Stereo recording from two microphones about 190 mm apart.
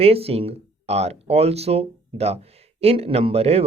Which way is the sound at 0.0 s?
30° right (ahead or behind).